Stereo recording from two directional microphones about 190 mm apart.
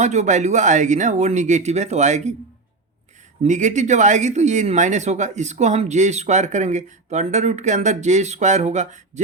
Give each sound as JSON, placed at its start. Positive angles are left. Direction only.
{"t": 0.0, "sound": "speech", "side_deg": -40}
{"t": 3.4, "sound": "speech", "side_deg": -40}